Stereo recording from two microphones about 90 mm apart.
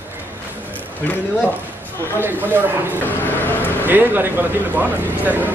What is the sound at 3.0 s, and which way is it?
Vehicle, 20° left (ahead or behind).